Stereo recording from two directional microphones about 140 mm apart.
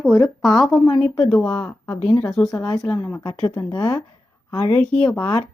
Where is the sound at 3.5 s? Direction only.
25° left (ahead or behind).